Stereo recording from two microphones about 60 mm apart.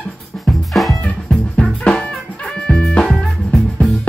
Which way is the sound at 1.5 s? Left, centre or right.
Centre.